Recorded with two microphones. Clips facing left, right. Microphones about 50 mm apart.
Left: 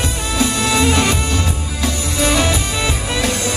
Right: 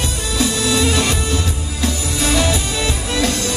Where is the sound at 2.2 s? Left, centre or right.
Left.